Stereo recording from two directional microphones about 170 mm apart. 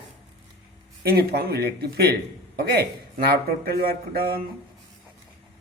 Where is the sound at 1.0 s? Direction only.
70° right (ahead or behind).